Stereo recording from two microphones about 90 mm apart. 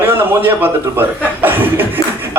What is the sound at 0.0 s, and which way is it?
A man's voice, 25° right (ahead or behind).